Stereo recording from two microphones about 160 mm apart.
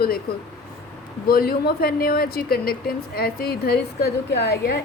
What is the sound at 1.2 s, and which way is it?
A woman's voice, 70° left (ahead or behind).